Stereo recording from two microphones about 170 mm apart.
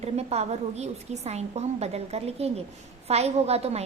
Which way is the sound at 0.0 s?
40° right (ahead or behind).